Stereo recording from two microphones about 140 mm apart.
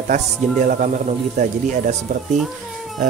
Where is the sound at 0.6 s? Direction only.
70° right (ahead or behind).